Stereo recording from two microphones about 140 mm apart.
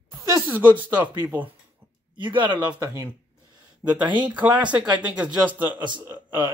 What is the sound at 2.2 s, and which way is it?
Speech, 35° right (ahead or behind).